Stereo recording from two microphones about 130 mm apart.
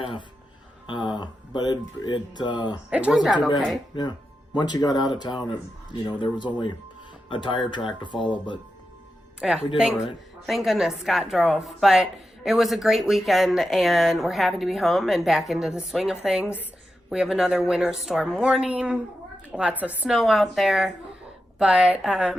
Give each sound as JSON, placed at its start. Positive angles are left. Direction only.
{"t": 0.0, "sound": "speech", "side_deg": 45}
{"t": 2.9, "sound": "speech", "side_deg": -5}
{"t": 4.5, "sound": "speech", "side_deg": 30}
{"t": 9.4, "sound": "a woman's voice", "side_deg": 0}